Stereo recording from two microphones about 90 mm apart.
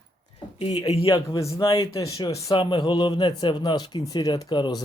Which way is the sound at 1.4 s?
35° left (ahead or behind).